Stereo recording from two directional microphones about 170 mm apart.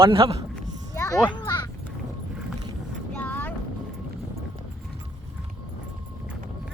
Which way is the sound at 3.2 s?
10° left (ahead or behind).